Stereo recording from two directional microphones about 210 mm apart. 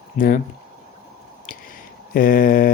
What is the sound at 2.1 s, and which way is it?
Mantra, 40° left (ahead or behind).